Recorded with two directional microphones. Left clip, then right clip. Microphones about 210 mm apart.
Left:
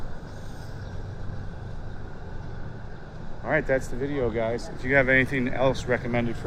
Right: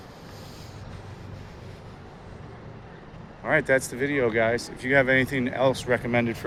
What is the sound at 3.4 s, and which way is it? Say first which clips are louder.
Speech: right 2 dB; 15° right (ahead or behind).